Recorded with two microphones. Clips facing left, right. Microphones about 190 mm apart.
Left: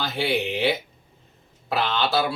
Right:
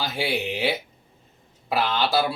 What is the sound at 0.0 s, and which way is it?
Speech, 10° right (ahead or behind).